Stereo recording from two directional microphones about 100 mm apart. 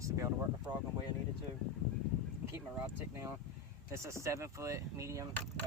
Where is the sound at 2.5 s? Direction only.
25° right (ahead or behind).